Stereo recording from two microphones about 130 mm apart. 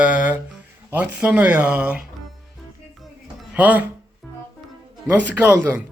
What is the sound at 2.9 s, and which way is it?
Music, centre (ahead or behind).